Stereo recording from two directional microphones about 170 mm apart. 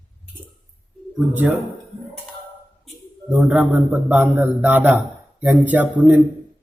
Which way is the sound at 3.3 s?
5° right (ahead or behind).